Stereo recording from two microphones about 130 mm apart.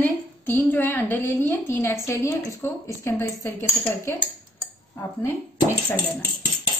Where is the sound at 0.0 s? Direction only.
15° left (ahead or behind).